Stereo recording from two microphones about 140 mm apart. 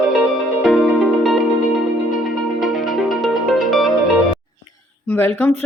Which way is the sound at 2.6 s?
Centre (ahead or behind).